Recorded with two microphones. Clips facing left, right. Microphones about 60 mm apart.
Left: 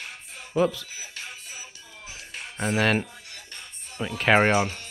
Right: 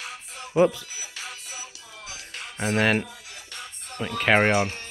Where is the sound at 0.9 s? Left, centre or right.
Right.